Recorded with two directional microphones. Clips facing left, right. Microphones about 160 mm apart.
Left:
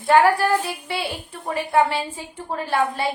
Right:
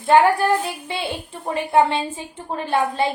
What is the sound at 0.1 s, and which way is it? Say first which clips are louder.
A woman's voice: right 1 dB; 20° right (ahead or behind).